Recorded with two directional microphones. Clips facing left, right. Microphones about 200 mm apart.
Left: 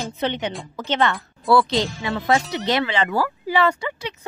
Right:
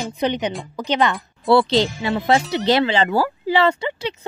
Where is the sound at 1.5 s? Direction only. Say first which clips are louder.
Right 3 dB; 30° right (ahead or behind).